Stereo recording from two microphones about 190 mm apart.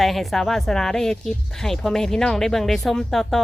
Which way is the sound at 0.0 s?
Centre (ahead or behind).